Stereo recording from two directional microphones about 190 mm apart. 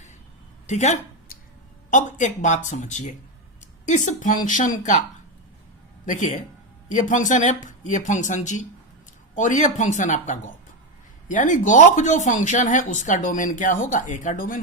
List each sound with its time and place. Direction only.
0.7 s speech: 40° left (ahead or behind)
6.1 s speech: 40° left (ahead or behind)